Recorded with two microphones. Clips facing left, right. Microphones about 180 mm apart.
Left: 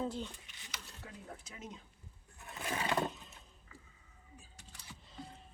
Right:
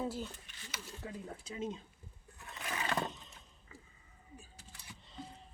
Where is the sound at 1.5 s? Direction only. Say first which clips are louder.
Right 10 dB; 30° right (ahead or behind).